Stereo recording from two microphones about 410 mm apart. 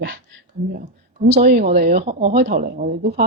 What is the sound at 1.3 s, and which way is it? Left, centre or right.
Speech, centre.